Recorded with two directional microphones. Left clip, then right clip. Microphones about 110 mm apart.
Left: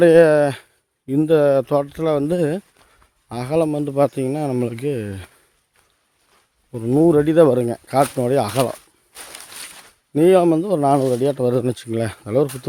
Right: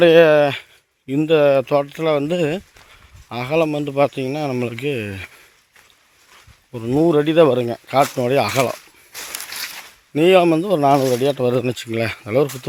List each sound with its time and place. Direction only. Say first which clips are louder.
0.0 s speech: right 1 dB; 40° left (ahead or behind)
7.0 s speech: even; 45° left (ahead or behind)
8.2 s speech: right 1 dB; 30° left (ahead or behind)
9.5 s a sound: right 8 dB; 50° right (ahead or behind)
10.2 s speech: right 1 dB; 30° left (ahead or behind)
10.5 s speech: right 2 dB; 20° left (ahead or behind)
11.2 s speech: right 1 dB; 35° left (ahead or behind)